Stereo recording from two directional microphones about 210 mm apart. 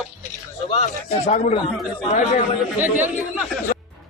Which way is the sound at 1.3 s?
35° left (ahead or behind).